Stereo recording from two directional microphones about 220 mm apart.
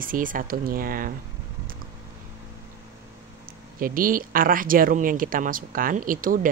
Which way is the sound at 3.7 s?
40° right (ahead or behind).